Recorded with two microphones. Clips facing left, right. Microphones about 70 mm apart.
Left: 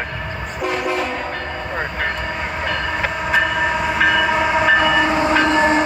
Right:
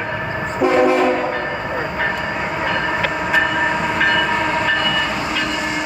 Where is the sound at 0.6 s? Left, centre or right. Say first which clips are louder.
Right 8 dB; centre.